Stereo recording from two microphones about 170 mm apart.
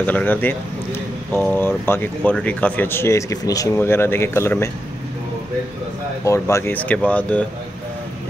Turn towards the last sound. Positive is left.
turn(degrees=10)  # may be behind; listen again after turning